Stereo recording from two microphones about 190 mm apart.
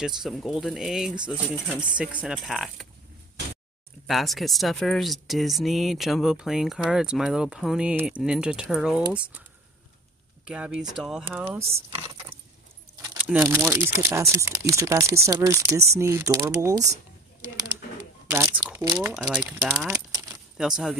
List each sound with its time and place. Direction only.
0.0 s speech: centre (ahead or behind)
4.1 s speech: centre (ahead or behind)
10.4 s speech: 5° right (ahead or behind)
18.3 s speech: 10° right (ahead or behind)
19.5 s speech: centre (ahead or behind)
19.9 s keys jangling: 15° right (ahead or behind)
20.5 s speech: centre (ahead or behind)